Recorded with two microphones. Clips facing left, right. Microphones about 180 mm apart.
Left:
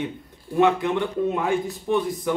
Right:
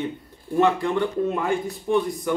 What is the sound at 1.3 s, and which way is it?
A man's voice, centre (ahead or behind).